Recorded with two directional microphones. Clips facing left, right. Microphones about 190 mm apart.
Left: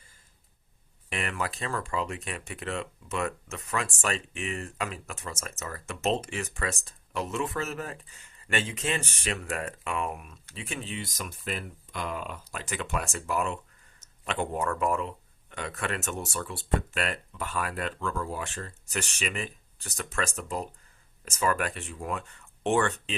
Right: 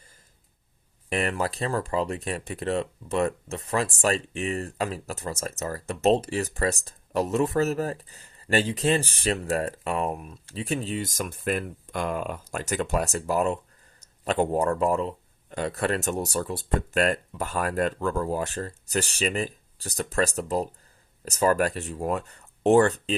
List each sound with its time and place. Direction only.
1.1 s speech: 35° right (ahead or behind)